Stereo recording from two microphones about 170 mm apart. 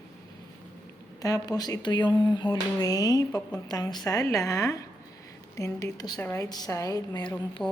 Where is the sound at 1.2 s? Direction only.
20° left (ahead or behind).